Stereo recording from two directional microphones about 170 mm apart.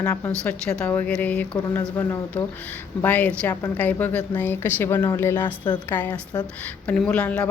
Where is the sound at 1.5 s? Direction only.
20° left (ahead or behind).